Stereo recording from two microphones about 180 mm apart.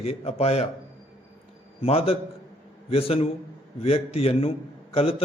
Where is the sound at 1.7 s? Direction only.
35° left (ahead or behind).